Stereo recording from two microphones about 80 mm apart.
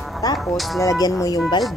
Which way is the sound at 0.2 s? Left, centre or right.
Left.